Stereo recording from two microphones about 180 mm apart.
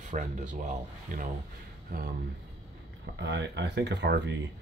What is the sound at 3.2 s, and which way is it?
Speech, 75° right (ahead or behind).